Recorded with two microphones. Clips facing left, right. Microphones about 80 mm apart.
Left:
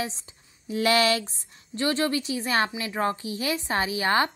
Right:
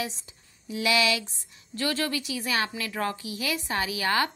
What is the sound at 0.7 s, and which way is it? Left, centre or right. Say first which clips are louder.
Speech: left 3 dB; left.